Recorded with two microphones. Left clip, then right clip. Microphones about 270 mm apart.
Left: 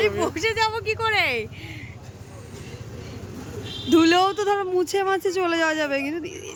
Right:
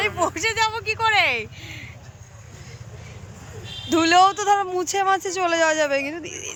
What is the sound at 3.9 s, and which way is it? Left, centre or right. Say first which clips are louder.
Speech: right 2 dB; centre.